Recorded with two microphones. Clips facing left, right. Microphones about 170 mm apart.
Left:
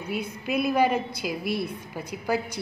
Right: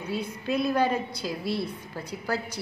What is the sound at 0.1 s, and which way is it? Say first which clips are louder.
A woman's voice: even; 10° left (ahead or behind).